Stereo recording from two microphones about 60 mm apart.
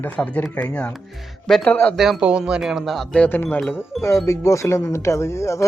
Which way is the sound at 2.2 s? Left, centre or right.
Centre.